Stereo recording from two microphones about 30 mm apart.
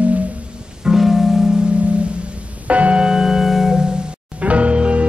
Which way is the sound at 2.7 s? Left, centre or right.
Right.